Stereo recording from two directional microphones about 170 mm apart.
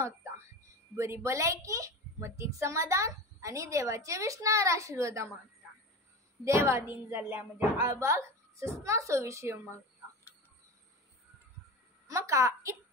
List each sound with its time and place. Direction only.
0.9 s a child's voice: 15° right (ahead or behind)
6.4 s a child's voice: 15° right (ahead or behind)
12.1 s a child's voice: 15° right (ahead or behind)